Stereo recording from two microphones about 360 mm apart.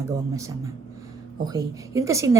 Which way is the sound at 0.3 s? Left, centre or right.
Centre.